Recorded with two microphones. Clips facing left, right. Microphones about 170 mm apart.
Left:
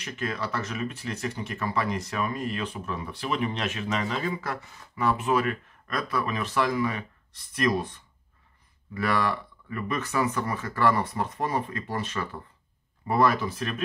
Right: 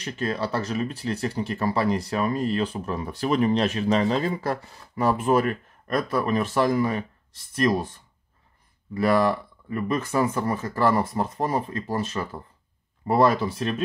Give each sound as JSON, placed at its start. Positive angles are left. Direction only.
{"t": 0.0, "sound": "speech", "side_deg": -30}
{"t": 8.9, "sound": "speech", "side_deg": -35}